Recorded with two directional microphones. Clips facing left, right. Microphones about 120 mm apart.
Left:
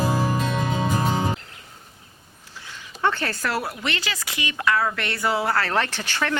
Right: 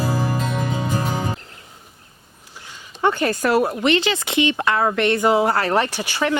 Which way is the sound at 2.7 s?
15° right (ahead or behind).